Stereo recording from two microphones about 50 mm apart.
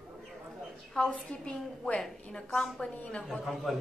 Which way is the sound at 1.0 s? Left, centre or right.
Centre.